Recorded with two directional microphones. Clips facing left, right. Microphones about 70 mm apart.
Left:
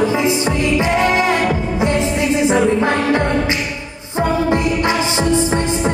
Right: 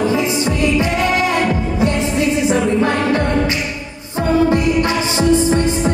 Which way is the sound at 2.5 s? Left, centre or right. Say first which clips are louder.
Left 1 dB; left.